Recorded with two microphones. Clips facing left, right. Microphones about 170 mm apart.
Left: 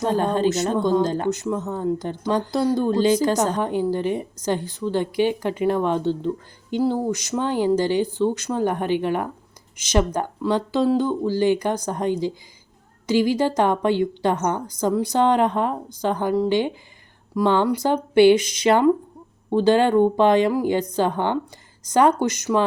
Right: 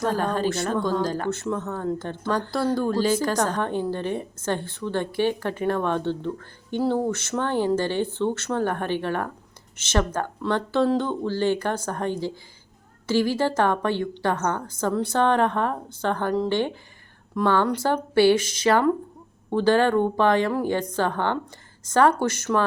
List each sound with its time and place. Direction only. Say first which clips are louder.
0.0 s speech: left 4 dB; 20° left (ahead or behind)